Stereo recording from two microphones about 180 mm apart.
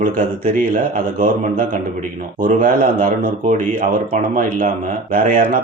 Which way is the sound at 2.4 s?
45° right (ahead or behind).